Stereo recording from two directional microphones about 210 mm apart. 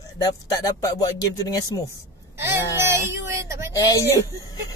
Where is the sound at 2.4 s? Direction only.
10° right (ahead or behind).